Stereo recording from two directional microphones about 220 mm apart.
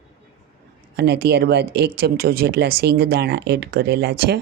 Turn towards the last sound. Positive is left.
turn(degrees=-45)  # may be behind; listen again after turning